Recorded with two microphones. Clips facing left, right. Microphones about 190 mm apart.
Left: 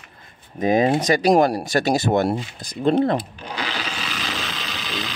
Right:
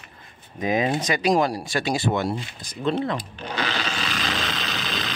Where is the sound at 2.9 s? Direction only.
45° left (ahead or behind).